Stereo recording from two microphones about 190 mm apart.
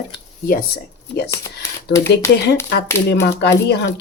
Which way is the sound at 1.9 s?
15° left (ahead or behind).